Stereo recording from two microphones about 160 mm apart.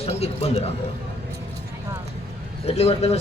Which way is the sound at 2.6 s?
40° left (ahead or behind).